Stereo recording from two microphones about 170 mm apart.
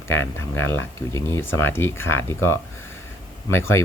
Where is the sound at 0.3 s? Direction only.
15° left (ahead or behind).